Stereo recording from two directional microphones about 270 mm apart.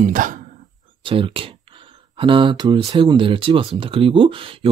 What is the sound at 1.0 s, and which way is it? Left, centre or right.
Speech, centre.